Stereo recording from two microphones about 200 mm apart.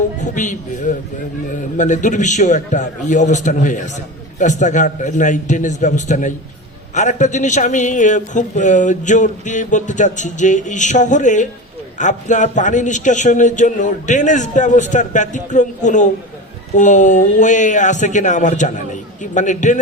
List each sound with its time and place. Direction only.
0.2 s a man's voice: 40° left (ahead or behind)